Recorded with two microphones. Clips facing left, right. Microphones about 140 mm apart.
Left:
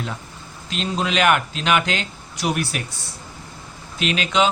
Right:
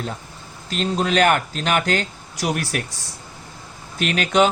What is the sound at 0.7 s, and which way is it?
A man's voice, 40° right (ahead or behind).